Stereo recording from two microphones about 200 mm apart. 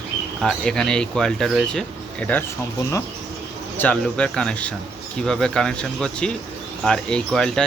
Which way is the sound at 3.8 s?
5° left (ahead or behind).